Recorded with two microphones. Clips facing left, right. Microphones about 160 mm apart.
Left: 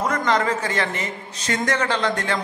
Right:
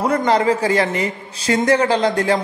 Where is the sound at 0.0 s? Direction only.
30° right (ahead or behind).